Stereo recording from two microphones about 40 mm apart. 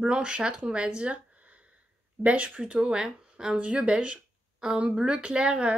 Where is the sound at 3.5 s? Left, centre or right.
Right.